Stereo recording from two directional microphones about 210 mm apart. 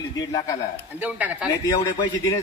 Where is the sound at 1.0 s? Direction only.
5° right (ahead or behind).